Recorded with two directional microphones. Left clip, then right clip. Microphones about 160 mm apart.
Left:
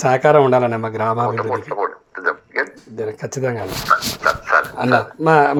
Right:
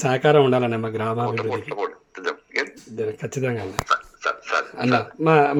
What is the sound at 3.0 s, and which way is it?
Speech, 25° right (ahead or behind).